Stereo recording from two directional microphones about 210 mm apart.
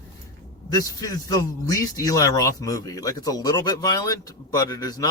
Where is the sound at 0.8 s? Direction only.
15° left (ahead or behind).